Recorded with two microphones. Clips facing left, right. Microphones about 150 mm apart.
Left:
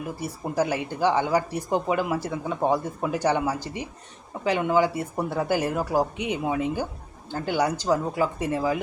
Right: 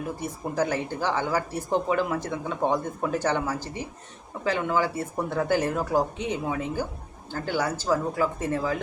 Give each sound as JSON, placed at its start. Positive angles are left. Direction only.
{"t": 0.2, "sound": "speech", "side_deg": 10}